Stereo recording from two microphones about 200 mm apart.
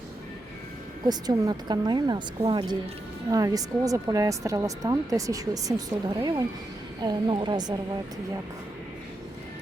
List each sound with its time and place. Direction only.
1.0 s a woman's voice: 20° right (ahead or behind)